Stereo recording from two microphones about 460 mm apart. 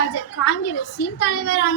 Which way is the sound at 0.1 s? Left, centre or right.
Left.